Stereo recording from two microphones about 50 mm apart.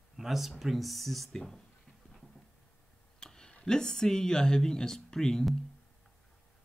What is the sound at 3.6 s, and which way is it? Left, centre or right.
Speech, centre.